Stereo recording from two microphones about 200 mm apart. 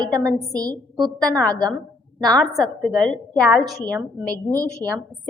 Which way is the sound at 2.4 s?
Centre (ahead or behind).